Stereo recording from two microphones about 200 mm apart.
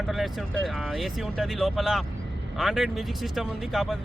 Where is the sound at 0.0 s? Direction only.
Centre (ahead or behind).